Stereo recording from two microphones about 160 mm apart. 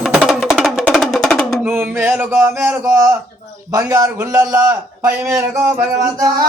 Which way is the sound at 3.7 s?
20° right (ahead or behind).